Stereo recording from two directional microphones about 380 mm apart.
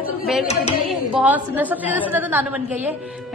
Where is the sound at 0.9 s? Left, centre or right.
Centre.